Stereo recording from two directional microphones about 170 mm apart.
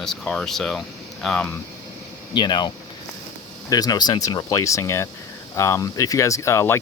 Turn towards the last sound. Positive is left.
turn(degrees=15)  # may be behind; listen again after turning